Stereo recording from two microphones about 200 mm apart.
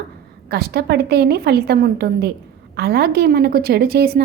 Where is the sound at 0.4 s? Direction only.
50° right (ahead or behind).